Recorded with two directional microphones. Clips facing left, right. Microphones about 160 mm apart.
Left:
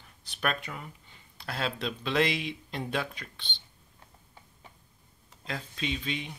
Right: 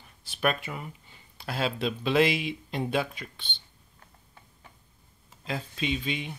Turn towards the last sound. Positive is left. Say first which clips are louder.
# right 3 dB
turn(degrees=-5)  # may be behind; listen again after turning